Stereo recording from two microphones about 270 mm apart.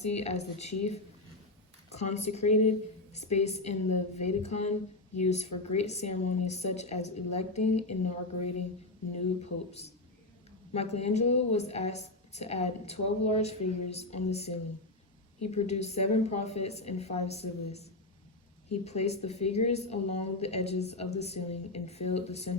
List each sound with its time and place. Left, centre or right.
0.0 s a woman's voice: left
1.9 s a woman's voice: left
9.1 s a woman's voice: left
18.9 s a woman's voice: left